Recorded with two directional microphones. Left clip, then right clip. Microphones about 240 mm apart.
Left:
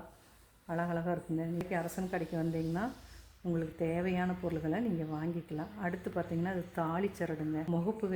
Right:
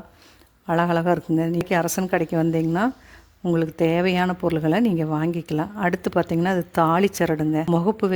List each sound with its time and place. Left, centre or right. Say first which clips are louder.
0.7 s speech: right 15 dB; right